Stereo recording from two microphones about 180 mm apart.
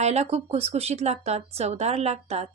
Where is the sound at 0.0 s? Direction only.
35° right (ahead or behind).